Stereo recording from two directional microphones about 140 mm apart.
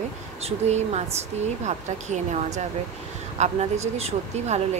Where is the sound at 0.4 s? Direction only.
50° right (ahead or behind).